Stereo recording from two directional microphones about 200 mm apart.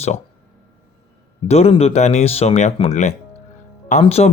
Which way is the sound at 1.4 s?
30° left (ahead or behind).